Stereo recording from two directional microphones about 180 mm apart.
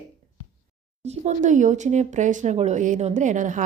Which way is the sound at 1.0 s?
35° right (ahead or behind).